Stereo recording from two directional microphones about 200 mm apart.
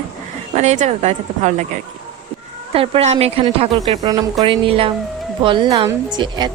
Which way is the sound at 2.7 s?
30° right (ahead or behind).